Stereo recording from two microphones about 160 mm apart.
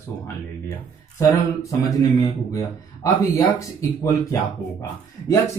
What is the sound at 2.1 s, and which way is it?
Speech, 20° left (ahead or behind).